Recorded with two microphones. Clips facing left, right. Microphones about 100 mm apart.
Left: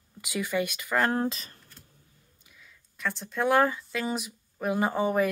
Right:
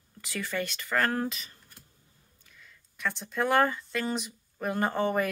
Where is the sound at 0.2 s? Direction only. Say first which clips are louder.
Left 4 dB; 15° left (ahead or behind).